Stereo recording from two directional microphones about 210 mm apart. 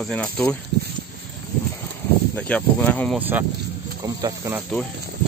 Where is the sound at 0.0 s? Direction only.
5° left (ahead or behind).